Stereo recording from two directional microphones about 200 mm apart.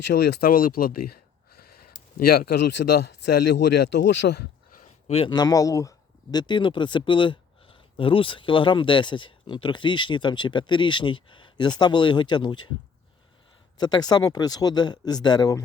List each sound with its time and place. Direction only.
0.1 s speech: 55° left (ahead or behind); by 12.6 s 25° left (ahead or behind)
13.7 s speech: 20° left (ahead or behind)